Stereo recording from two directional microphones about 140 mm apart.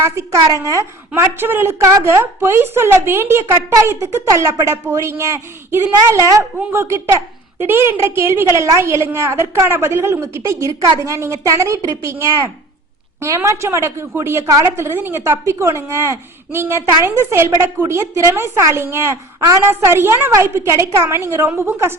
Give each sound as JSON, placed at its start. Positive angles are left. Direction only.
{"t": 0.0, "sound": "a woman's voice", "side_deg": -20}